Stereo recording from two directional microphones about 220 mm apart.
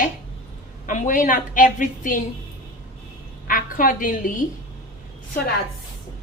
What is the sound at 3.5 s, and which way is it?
Speech, 40° left (ahead or behind).